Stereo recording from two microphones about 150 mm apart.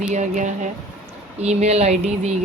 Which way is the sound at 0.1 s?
55° right (ahead or behind).